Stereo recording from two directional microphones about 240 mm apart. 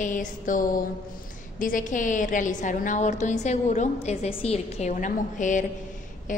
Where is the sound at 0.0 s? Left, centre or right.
Left.